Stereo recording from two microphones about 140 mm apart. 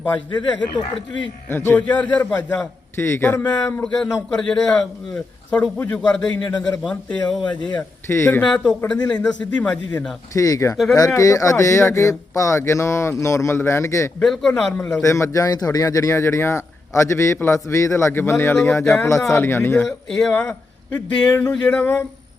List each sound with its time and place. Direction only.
0.0 s a man's voice: 10° left (ahead or behind)
3.8 s a man's voice: 5° left (ahead or behind)
7.8 s a man's voice: 15° left (ahead or behind)
10.3 s speech: 25° left (ahead or behind)
14.2 s a man's voice: 5° left (ahead or behind)
15.0 s a man's voice: 20° left (ahead or behind)
20.1 s a man's voice: 5° left (ahead or behind)